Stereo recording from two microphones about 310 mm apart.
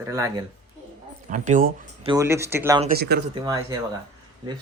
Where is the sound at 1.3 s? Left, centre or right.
Right.